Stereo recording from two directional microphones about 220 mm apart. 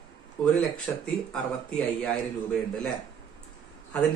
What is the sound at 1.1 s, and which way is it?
A man's voice, centre (ahead or behind).